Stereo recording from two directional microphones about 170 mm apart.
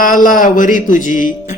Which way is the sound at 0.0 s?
50° left (ahead or behind).